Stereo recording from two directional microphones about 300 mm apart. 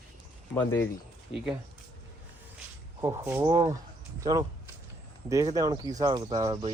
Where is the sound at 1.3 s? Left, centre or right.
Centre.